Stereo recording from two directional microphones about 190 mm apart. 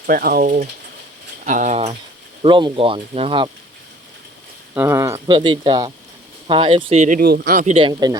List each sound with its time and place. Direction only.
0.1 s speech: 50° right (ahead or behind); by 2.0 s 35° right (ahead or behind)
2.4 s speech: 25° right (ahead or behind)
4.7 s speech: 15° right (ahead or behind); by 7.8 s 45° right (ahead or behind)
7.8 s speech: 25° right (ahead or behind)